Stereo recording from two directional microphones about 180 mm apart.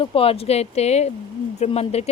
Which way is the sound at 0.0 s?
30° left (ahead or behind).